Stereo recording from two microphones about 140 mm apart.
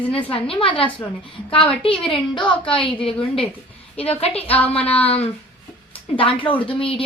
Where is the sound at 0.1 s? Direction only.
40° left (ahead or behind).